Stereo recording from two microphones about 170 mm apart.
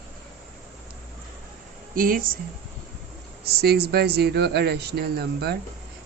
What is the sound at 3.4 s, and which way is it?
Speech, 65° right (ahead or behind).